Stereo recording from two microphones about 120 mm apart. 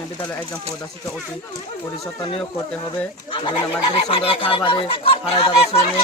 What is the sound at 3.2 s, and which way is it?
Speech, 45° left (ahead or behind).